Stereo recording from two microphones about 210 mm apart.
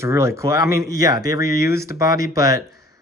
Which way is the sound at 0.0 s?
15° right (ahead or behind).